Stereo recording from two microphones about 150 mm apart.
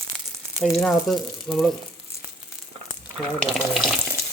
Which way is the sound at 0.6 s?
Centre (ahead or behind).